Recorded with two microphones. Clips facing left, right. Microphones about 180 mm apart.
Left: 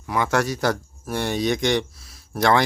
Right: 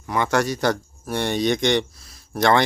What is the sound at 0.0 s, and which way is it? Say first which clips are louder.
Speech: right 1 dB; centre (ahead or behind).